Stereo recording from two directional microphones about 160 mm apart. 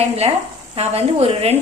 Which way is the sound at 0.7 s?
40° right (ahead or behind).